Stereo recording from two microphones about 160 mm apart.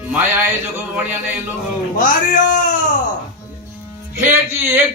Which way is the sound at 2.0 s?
60° left (ahead or behind).